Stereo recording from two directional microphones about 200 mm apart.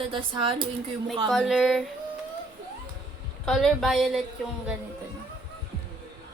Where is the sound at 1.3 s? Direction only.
Centre (ahead or behind).